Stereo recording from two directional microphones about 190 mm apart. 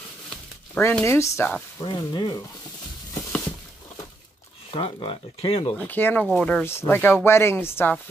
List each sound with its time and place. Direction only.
0.3 s speech: 5° left (ahead or behind); by 2.4 s 25° left (ahead or behind)
4.7 s speech: 25° left (ahead or behind)
5.8 s speech: 10° left (ahead or behind)